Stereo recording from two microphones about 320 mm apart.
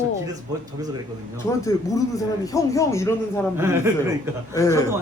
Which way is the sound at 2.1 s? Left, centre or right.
Centre.